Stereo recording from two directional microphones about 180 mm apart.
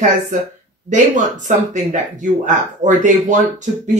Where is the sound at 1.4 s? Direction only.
45° right (ahead or behind).